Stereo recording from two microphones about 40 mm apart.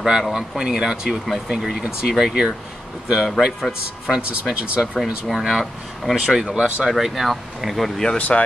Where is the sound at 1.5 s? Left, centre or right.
Centre.